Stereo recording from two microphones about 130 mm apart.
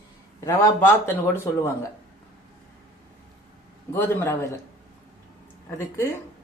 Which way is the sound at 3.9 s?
20° left (ahead or behind).